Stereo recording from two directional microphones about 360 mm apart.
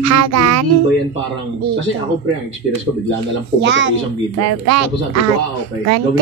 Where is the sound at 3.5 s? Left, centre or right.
Right.